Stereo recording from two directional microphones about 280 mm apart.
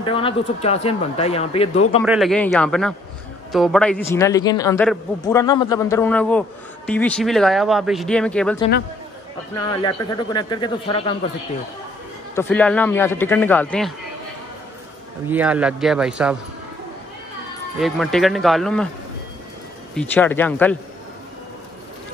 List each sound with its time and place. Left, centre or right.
0.0 s speech: centre
2.0 s a man's voice: centre
9.8 s a man's voice: centre
12.4 s a man's voice: centre
15.2 s speech: centre
17.7 s speech: centre
20.0 s speech: centre